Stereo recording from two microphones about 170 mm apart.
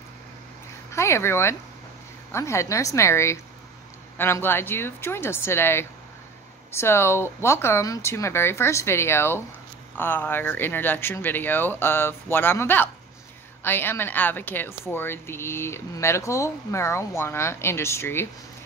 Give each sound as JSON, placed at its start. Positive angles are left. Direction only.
{"t": 0.9, "sound": "a woman's voice", "side_deg": 15}